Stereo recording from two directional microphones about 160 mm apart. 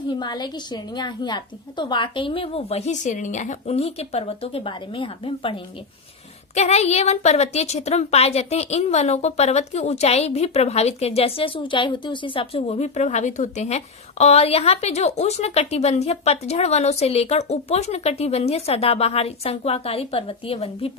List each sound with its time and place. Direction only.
0.1 s a woman's voice: 25° left (ahead or behind)